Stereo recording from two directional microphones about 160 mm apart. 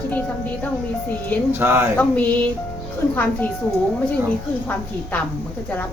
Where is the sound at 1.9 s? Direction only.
10° left (ahead or behind).